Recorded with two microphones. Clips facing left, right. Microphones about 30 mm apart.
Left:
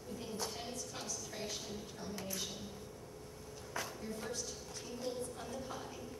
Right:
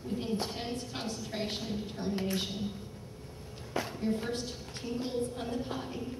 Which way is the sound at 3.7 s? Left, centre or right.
Right.